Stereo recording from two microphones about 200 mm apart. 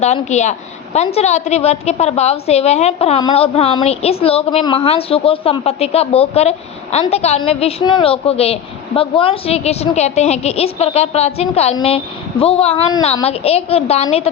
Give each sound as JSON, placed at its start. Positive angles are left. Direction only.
{"t": 0.0, "sound": "a woman's voice", "side_deg": 35}